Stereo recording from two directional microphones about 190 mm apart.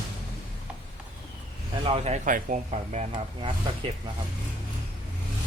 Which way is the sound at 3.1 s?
25° right (ahead or behind).